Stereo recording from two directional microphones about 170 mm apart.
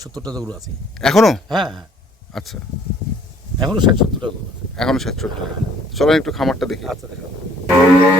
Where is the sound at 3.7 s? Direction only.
25° right (ahead or behind).